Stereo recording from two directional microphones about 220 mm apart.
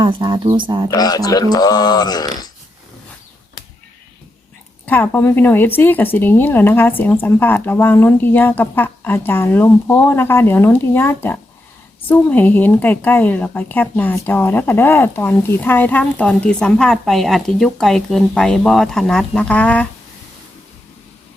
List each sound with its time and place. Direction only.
0.0 s speech: 20° right (ahead or behind)
0.9 s a woman's voice: 15° left (ahead or behind)
4.9 s a woman's voice: 10° left (ahead or behind)